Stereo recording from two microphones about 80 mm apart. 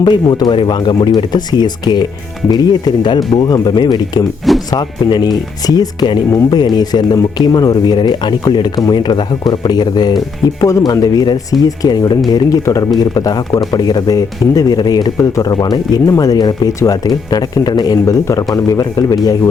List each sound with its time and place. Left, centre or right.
0.0 s speech: left
10.6 s speech: left
18.0 s speech: left